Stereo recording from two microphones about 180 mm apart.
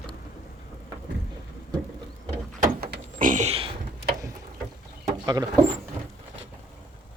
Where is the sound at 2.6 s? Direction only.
55° right (ahead or behind); by 3.7 s 35° right (ahead or behind).